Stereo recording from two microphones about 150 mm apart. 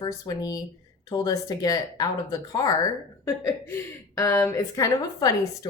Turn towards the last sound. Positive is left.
turn(degrees=20)  # may be behind; listen again after turning